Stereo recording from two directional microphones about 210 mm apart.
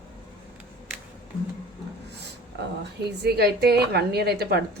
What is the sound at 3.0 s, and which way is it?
A woman's voice, 50° right (ahead or behind).